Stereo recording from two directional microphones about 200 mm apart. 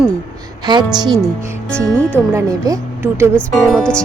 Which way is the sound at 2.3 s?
15° right (ahead or behind).